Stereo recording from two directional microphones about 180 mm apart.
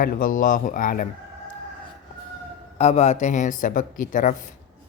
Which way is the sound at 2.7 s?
35° left (ahead or behind).